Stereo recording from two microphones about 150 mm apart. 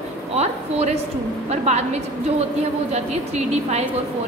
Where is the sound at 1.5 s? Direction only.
45° right (ahead or behind).